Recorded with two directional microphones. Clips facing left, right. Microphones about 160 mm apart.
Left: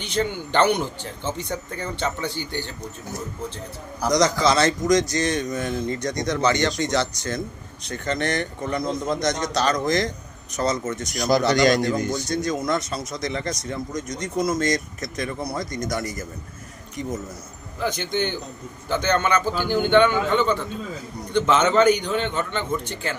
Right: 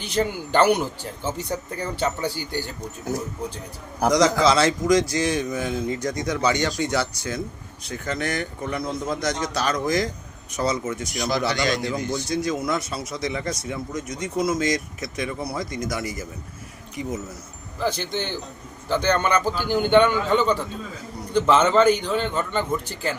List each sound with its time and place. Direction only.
0.5 s speech: 10° right (ahead or behind)
4.1 s speech: 5° right (ahead or behind)
11.3 s a man's voice: 40° left (ahead or behind)
12.1 s speech: 5° right (ahead or behind)
18.9 s a man's voice: 10° right (ahead or behind)